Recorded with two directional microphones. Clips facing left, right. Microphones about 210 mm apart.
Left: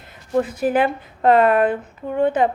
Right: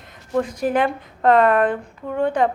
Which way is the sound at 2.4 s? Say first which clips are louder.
Right 1 dB; 5° left (ahead or behind).